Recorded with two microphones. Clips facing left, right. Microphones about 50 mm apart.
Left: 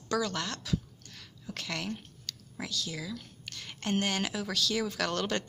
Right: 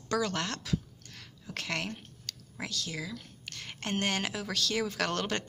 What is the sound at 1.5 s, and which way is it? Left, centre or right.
A woman's voice, right.